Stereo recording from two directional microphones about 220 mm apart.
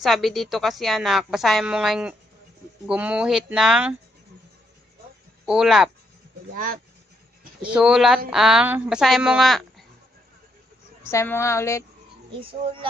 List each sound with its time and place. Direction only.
0.0 s a woman's voice: centre (ahead or behind)
5.4 s speech: centre (ahead or behind)
6.5 s speech: 40° right (ahead or behind)
7.6 s a woman's voice: 5° right (ahead or behind)
11.1 s a woman's voice: 10° left (ahead or behind)
12.3 s speech: 25° right (ahead or behind)